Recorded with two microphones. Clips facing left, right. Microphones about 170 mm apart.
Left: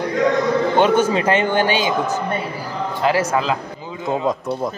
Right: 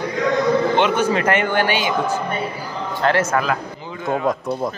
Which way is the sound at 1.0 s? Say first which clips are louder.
Left 1 dB; 20° left (ahead or behind).